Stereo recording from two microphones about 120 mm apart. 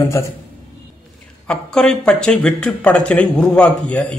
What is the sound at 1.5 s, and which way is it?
Speech, 5° left (ahead or behind).